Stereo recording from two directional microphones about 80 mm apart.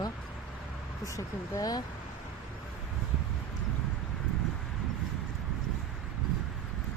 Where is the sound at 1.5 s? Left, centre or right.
Left.